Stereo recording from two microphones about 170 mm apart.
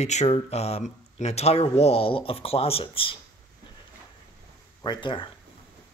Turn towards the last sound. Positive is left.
turn(degrees=30)  # may be behind; listen again after turning